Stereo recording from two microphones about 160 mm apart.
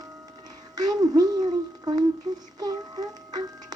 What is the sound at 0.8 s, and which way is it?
Music, 25° right (ahead or behind).